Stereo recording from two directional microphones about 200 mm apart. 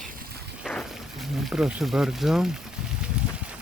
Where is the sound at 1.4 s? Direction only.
Centre (ahead or behind).